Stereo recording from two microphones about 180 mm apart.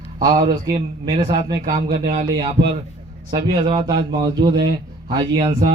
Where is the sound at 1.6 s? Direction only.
50° right (ahead or behind).